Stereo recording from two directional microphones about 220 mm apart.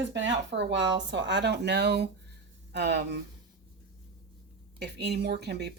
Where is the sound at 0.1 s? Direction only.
55° right (ahead or behind).